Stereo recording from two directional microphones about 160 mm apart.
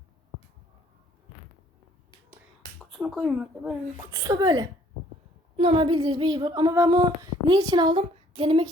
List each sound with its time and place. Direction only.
2.7 s speech: 5° left (ahead or behind)
3.9 s female singing: 20° right (ahead or behind)
8.4 s a sound: 35° right (ahead or behind)